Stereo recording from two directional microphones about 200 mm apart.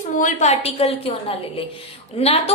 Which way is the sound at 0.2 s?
40° left (ahead or behind).